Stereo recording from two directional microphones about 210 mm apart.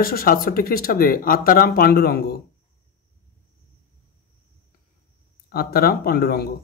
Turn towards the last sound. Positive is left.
turn(degrees=45)  # may be behind; listen again after turning